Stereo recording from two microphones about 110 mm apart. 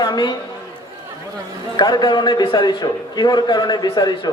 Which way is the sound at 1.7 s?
40° left (ahead or behind).